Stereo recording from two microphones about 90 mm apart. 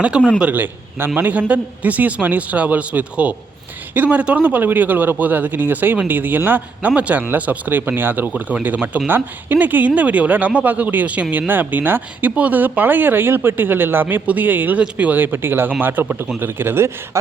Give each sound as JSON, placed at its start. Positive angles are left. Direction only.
{"t": 0.3, "sound": "a man's voice", "side_deg": -20}